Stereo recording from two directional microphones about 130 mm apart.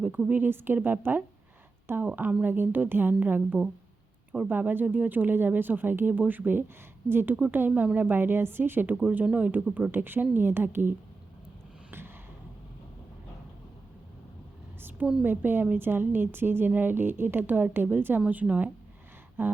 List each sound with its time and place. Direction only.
0.0 s a woman's voice: 10° right (ahead or behind)
11.9 s a sound: 15° right (ahead or behind)
14.8 s a woman's voice: 15° right (ahead or behind)